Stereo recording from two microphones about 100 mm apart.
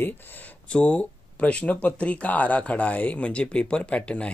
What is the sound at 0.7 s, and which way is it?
Speech, 10° left (ahead or behind).